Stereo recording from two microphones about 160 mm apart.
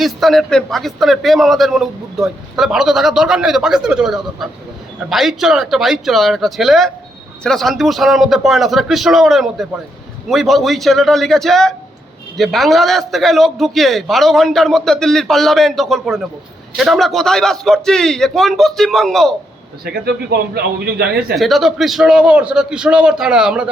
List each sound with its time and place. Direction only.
0.0 s a man's voice: centre (ahead or behind)
19.8 s a man's voice: 85° right
21.3 s a man's voice: centre (ahead or behind)